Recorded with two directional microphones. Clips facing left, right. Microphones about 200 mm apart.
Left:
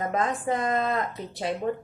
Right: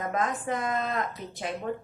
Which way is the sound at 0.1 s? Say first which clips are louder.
Left 1 dB; 30° left (ahead or behind).